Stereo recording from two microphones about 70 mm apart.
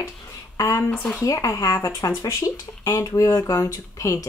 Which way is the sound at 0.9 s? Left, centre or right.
Centre.